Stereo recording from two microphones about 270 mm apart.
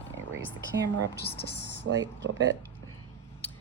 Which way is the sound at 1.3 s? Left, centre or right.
Left.